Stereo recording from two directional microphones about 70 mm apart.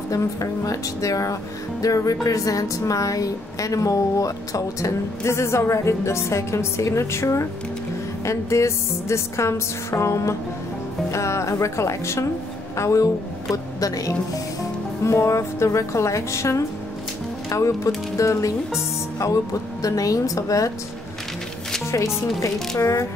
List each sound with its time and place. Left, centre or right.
0.1 s a woman's voice: left
15.0 s speech: left
22.8 s speech: left